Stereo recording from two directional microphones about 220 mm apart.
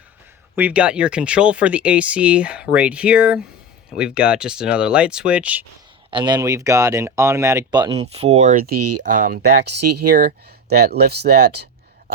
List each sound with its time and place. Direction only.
0.5 s speech: 5° right (ahead or behind)
6.1 s speech: 20° right (ahead or behind); by 8.8 s 45° right (ahead or behind)
8.8 s speech: 90° right
9.1 s speech: 40° right (ahead or behind)
9.7 s speech: 90° right
10.1 s speech: 40° right (ahead or behind)